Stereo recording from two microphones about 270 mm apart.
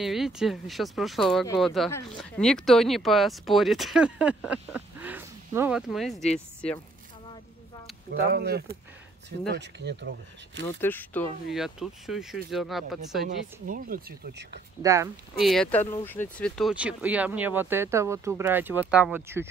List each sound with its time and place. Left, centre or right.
0.0 s speech: centre
8.1 s speech: right
10.8 s speech: centre
13.2 s speech: right
14.8 s speech: centre
15.3 s speech: centre